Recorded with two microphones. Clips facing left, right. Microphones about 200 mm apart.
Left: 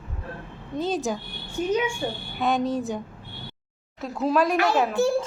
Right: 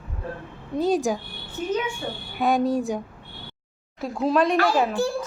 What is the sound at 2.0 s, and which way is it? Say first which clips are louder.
Speech: left 3 dB; 15° left (ahead or behind).